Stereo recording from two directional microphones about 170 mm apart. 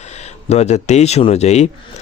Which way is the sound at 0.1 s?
40° left (ahead or behind).